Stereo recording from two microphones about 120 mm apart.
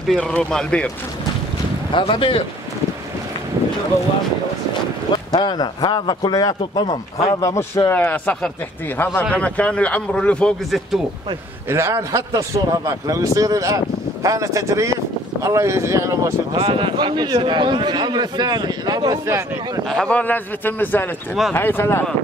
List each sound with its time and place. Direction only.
0.1 s speech: 5° left (ahead or behind)
1.9 s speech: 45° left (ahead or behind)
5.3 s a man's voice: 35° left (ahead or behind)
7.3 s speech: 25° left (ahead or behind)
7.9 s speech: 15° left (ahead or behind)
11.7 s a man's voice: 25° right (ahead or behind)
16.5 s a man's voice: 45° right (ahead or behind)
19.2 s a man's voice: 25° right (ahead or behind)
19.9 s speech: 5° left (ahead or behind)